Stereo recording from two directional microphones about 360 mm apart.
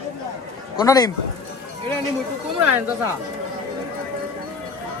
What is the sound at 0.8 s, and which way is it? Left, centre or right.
Speech, centre.